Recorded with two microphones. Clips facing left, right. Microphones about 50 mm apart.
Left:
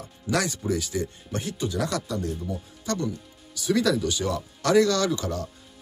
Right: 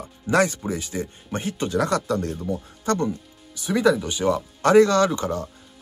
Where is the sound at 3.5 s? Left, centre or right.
Right.